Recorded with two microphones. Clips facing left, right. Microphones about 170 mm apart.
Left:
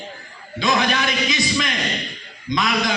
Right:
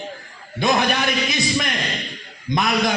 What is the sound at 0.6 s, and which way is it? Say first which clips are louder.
A man's voice: right 1 dB; 55° right (ahead or behind).